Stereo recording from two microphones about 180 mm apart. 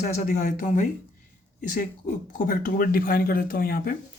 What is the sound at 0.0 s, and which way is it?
Speech, 50° left (ahead or behind).